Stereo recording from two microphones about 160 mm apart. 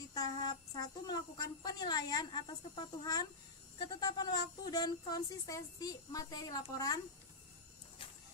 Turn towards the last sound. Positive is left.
turn(degrees=20)  # may be behind; listen again after turning